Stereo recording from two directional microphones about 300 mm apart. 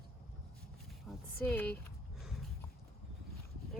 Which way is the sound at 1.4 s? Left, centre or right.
Centre.